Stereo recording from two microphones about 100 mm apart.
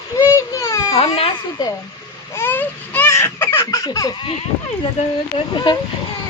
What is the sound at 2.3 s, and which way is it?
Baby cry, 20° left (ahead or behind).